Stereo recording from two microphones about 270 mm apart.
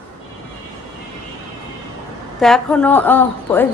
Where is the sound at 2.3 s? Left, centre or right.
Centre.